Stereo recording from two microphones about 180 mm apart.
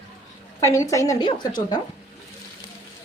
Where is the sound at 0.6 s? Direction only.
20° left (ahead or behind).